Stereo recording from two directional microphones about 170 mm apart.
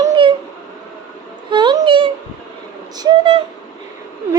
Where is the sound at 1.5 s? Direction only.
25° right (ahead or behind).